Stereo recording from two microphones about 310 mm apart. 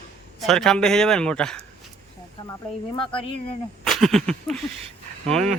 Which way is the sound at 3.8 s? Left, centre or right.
Centre.